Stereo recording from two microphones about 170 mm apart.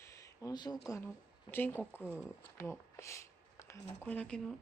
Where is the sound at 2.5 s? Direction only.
15° left (ahead or behind).